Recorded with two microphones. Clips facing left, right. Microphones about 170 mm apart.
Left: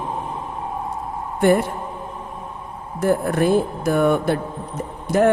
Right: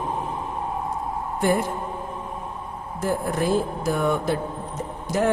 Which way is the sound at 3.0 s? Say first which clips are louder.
Left 6 dB; 60° left (ahead or behind).